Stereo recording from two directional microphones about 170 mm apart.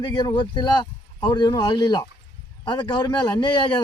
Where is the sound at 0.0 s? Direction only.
25° left (ahead or behind).